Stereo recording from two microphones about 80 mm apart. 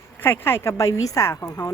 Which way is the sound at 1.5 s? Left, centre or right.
Left.